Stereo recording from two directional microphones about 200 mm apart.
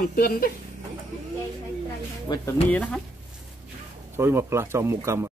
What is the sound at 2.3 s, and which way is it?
Speech, 20° left (ahead or behind).